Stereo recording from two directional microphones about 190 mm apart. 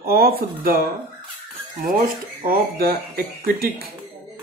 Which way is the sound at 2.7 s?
50° right (ahead or behind).